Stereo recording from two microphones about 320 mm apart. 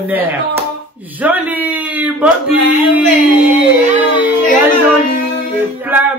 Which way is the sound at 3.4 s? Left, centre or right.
Centre.